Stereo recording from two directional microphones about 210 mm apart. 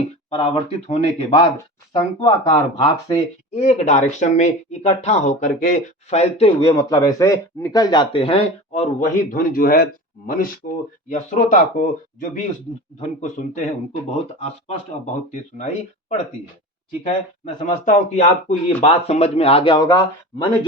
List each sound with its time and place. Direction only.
0.3 s speech: 30° left (ahead or behind)
2.2 s speech: 20° left (ahead or behind)
3.7 s speech: 35° left (ahead or behind)
15.0 s speech: 35° left (ahead or behind)
17.7 s speech: 35° left (ahead or behind); by 20.0 s 20° left (ahead or behind)